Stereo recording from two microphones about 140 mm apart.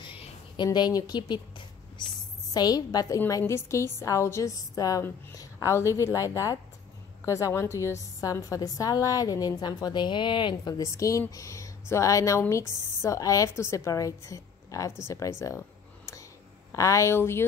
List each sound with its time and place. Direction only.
0.0 s a sound: 35° left (ahead or behind)
0.7 s a woman's voice: 30° left (ahead or behind)
2.5 s a woman's voice: 30° left (ahead or behind)
16.7 s a woman's voice: 20° left (ahead or behind)